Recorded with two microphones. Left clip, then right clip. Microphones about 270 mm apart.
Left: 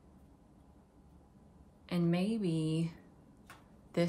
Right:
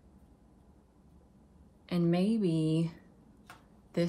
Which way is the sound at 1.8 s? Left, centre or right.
Centre.